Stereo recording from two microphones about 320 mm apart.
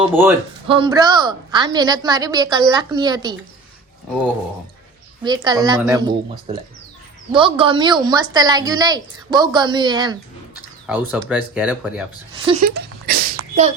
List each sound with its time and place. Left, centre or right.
0.1 s a woman's voice: centre
5.2 s a woman's voice: centre
12.6 s a sound: right